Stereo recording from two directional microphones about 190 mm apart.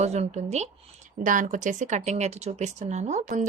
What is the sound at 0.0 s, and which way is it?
A woman's voice, 35° right (ahead or behind).